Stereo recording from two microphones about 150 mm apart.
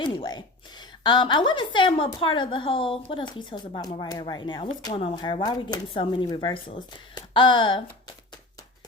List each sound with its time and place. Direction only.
0.0 s a woman's voice: 30° left (ahead or behind)